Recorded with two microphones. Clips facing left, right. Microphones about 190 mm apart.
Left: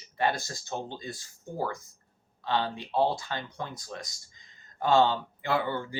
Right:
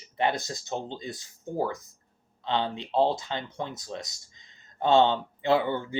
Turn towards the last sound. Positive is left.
turn(degrees=-20)  # may be behind; listen again after turning